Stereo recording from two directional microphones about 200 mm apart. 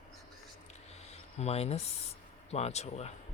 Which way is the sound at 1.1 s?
30° left (ahead or behind).